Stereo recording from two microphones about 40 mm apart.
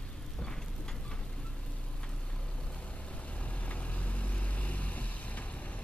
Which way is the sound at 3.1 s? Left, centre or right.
Left.